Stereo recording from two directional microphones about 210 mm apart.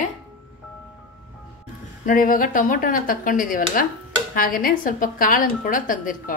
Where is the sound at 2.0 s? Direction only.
40° left (ahead or behind).